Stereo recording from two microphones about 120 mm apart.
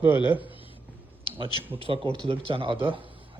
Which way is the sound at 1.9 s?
45° right (ahead or behind).